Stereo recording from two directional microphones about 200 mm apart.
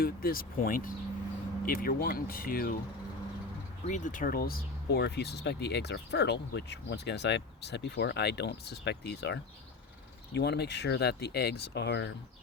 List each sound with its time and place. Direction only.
0.0 s speech: 50° left (ahead or behind)
3.8 s speech: 40° left (ahead or behind); by 12.1 s 60° left (ahead or behind)